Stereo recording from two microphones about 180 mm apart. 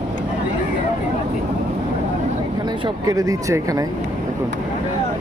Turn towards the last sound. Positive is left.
turn(degrees=-20)  # may be behind; listen again after turning